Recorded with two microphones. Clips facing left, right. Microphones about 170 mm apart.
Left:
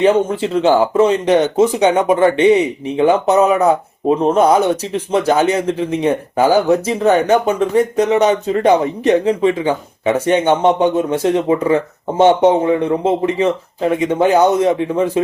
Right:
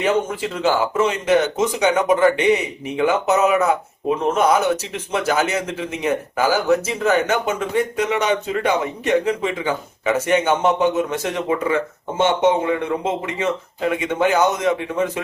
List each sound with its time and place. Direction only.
0.0 s speech: 30° left (ahead or behind)